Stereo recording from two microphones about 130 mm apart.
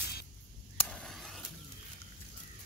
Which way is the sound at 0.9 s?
5° left (ahead or behind).